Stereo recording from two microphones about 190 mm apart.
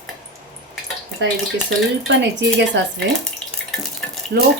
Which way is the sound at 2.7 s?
70° right (ahead or behind).